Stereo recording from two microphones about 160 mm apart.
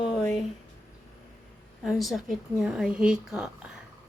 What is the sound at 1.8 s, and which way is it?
A woman's voice, centre (ahead or behind).